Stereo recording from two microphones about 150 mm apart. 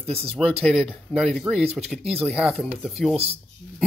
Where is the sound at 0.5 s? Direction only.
Centre (ahead or behind).